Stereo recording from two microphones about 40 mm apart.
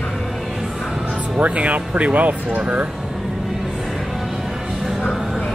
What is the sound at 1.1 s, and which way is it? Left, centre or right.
Speech, right.